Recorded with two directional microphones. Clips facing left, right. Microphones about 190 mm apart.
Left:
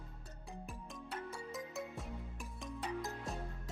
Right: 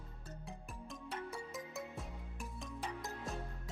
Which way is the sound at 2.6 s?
Centre (ahead or behind).